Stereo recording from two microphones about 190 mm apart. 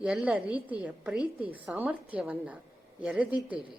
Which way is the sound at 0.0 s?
5° right (ahead or behind).